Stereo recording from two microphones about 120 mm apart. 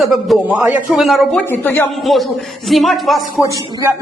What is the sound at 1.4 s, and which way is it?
Speech, 15° left (ahead or behind).